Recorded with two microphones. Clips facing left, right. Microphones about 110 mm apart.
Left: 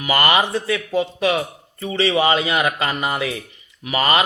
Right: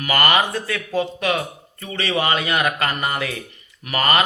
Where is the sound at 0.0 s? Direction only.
20° left (ahead or behind).